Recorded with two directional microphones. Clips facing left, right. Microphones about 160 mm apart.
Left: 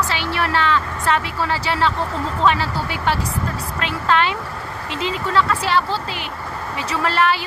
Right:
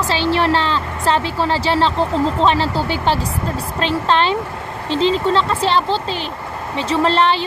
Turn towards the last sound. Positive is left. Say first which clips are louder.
# right 4 dB
turn(degrees=-30)  # may be behind; listen again after turning